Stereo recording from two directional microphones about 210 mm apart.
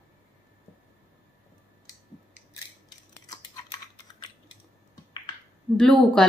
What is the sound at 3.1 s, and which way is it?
Scissors, 15° left (ahead or behind).